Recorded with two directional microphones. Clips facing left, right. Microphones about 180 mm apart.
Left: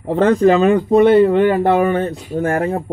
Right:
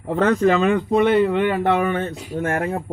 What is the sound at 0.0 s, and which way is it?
Speech, 30° left (ahead or behind).